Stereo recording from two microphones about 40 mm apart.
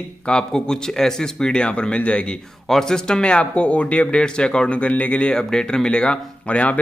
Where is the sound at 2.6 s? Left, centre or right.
Centre; by 4.2 s left.